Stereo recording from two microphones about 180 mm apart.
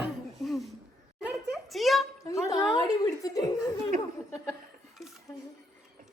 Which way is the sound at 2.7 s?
20° left (ahead or behind).